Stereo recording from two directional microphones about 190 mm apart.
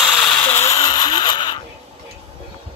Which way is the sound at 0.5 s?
15° left (ahead or behind).